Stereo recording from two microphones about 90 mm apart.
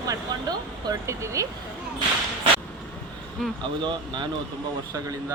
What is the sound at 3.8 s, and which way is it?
Speech, 60° right (ahead or behind).